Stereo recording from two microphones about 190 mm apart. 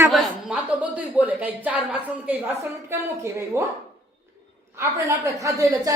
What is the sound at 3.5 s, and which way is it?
Speech, 15° right (ahead or behind).